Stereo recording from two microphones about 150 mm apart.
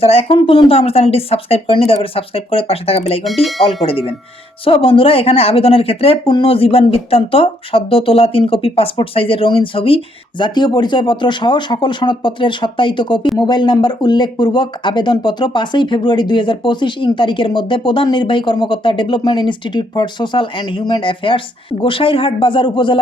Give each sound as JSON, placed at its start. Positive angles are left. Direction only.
{"t": 0.0, "sound": "speech", "side_deg": 40}